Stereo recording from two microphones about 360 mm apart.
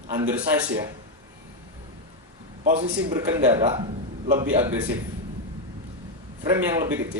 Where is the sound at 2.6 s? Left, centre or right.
Right.